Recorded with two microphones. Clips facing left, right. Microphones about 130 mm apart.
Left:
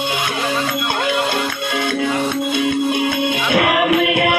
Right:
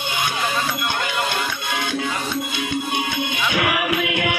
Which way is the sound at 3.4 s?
90° left.